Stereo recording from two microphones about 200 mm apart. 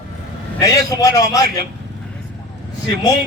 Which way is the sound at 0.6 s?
15° left (ahead or behind).